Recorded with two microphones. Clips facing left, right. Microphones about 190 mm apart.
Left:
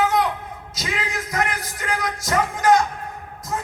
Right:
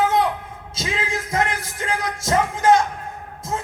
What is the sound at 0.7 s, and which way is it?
A man's voice, 25° right (ahead or behind).